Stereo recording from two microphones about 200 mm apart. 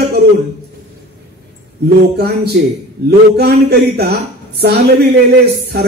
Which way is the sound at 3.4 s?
55° right (ahead or behind).